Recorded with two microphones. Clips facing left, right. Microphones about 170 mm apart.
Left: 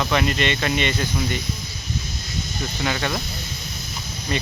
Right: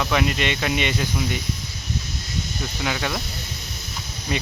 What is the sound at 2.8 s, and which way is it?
Speech, 5° right (ahead or behind).